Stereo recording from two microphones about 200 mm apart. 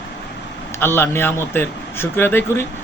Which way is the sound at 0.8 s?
10° left (ahead or behind).